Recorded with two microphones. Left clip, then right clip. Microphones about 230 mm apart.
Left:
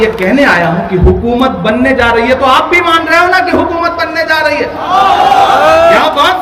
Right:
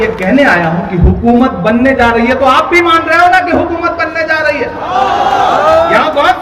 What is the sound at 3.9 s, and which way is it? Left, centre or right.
Speech, left.